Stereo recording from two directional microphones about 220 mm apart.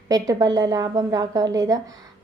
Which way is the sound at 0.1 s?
15° right (ahead or behind).